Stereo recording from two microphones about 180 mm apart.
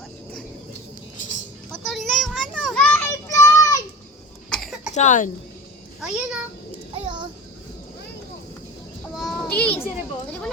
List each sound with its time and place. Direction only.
1.7 s children playing: centre (ahead or behind); by 3.8 s 15° left (ahead or behind)
4.4 s cough: centre (ahead or behind)
4.9 s a woman's voice: 45° left (ahead or behind)
6.0 s a child's voice: 5° right (ahead or behind)
6.9 s a sound: 30° right (ahead or behind)
9.1 s a sound: centre (ahead or behind)